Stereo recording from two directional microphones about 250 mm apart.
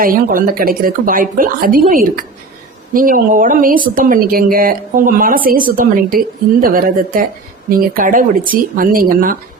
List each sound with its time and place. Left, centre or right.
0.0 s speech: right